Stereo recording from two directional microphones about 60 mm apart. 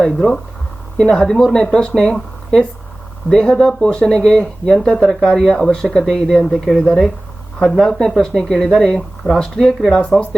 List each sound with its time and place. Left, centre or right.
0.0 s speech: centre